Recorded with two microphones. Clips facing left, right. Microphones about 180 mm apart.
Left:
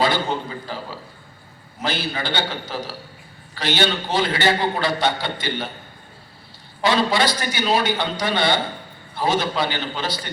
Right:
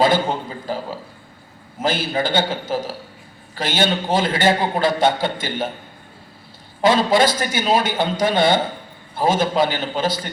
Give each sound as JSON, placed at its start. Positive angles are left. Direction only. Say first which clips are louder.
{"t": 0.0, "sound": "a man's voice", "louder": "right 4 dB", "side_deg": -45}
{"t": 6.8, "sound": "a man's voice", "louder": "right 4 dB", "side_deg": -45}